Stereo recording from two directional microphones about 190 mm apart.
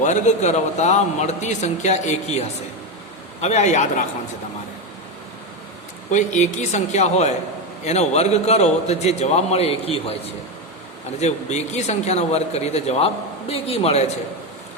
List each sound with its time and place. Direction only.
0.0 s a man's voice: 40° left (ahead or behind)
3.4 s a man's voice: 35° left (ahead or behind)
6.1 s a man's voice: 40° left (ahead or behind)
11.2 s a man's voice: 35° left (ahead or behind)